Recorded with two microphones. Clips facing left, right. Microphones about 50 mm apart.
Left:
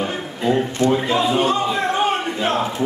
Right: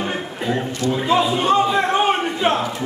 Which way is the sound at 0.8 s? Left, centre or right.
Left.